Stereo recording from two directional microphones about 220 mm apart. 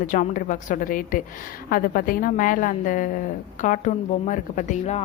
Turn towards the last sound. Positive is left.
turn(degrees=30)  # may be behind; listen again after turning